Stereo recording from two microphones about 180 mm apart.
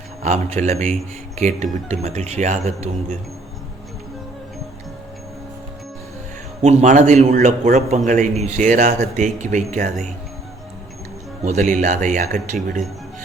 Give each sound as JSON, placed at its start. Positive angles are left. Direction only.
{"t": 0.2, "sound": "speech", "side_deg": -40}
{"t": 6.6, "sound": "a man's voice", "side_deg": -40}
{"t": 11.4, "sound": "a man's voice", "side_deg": -45}